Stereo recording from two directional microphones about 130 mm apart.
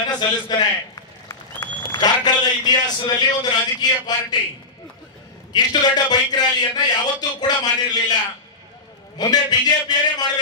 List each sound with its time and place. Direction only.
0.0 s a sound: 35° left (ahead or behind)
2.2 s a man's voice: 30° left (ahead or behind)
5.5 s a man's voice: 35° left (ahead or behind)
9.2 s a man's voice: 30° left (ahead or behind)